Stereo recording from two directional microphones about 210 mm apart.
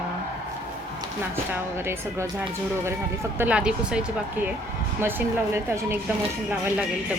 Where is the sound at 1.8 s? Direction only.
10° right (ahead or behind).